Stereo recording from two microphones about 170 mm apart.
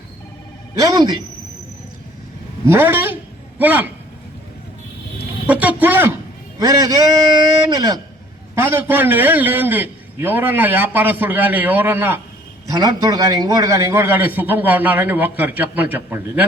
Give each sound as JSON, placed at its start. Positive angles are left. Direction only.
{"t": 0.8, "sound": "a man's voice", "side_deg": -20}
{"t": 2.6, "sound": "a man's voice", "side_deg": -10}
{"t": 5.5, "sound": "a man's voice", "side_deg": -10}